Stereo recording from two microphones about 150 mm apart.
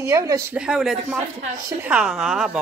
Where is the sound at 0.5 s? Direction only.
5° right (ahead or behind).